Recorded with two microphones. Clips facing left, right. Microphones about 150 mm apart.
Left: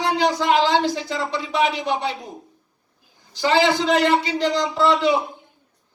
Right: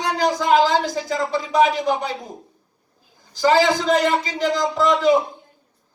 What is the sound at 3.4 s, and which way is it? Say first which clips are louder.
A man's voice: right 2 dB; 45° right (ahead or behind).